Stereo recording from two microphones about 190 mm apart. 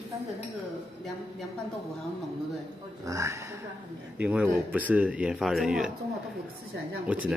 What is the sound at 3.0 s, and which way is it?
Speech, 15° right (ahead or behind).